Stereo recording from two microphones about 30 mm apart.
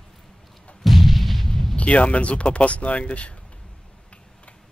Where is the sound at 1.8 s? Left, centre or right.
Left.